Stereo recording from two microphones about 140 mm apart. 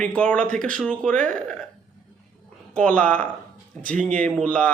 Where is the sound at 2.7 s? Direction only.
10° left (ahead or behind).